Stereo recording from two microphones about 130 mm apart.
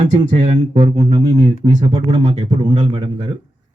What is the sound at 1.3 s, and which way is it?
Speech, 35° right (ahead or behind).